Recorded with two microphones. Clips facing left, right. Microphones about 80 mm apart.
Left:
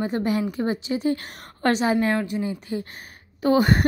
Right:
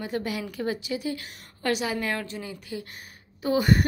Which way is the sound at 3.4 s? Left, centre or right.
Left.